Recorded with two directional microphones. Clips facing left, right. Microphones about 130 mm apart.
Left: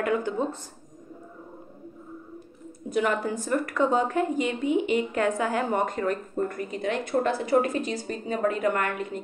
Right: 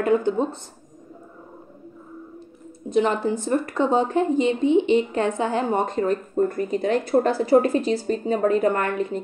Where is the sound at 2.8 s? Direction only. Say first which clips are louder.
Right 5 dB; 25° right (ahead or behind).